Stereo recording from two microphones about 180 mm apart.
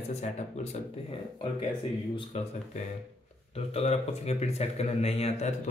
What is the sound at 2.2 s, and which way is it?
Speech, 40° left (ahead or behind).